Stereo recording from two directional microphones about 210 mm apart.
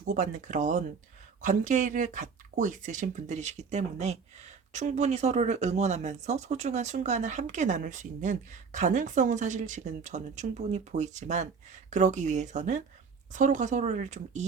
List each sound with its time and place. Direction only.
0.0 s speech: 35° right (ahead or behind)